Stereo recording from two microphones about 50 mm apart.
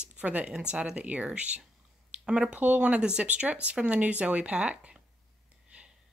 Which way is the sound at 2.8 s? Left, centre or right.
Centre.